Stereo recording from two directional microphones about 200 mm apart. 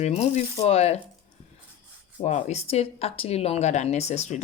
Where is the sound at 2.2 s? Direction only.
35° left (ahead or behind).